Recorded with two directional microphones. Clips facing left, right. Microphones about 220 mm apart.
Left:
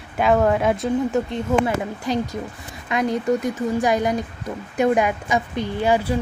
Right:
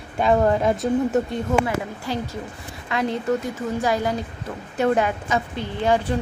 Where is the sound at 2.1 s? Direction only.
20° left (ahead or behind).